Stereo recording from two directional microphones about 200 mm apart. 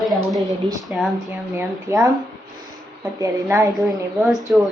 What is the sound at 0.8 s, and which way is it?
Speech, centre (ahead or behind).